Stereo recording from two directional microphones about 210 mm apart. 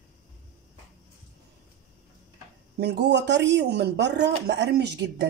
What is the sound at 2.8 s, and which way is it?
Speech, 55° right (ahead or behind).